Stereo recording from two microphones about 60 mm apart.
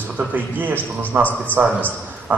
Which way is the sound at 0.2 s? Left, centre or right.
Right.